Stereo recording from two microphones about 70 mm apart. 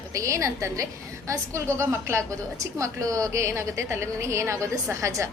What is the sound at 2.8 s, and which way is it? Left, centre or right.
A woman's voice, right.